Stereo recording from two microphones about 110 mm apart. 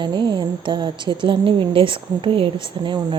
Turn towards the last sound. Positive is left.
turn(degrees=-45)  # may be behind; listen again after turning